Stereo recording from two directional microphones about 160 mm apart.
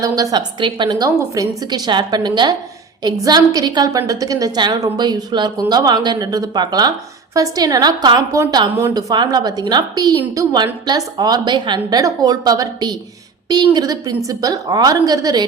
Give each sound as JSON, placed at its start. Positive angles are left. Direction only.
{"t": 0.0, "sound": "a woman's voice", "side_deg": -25}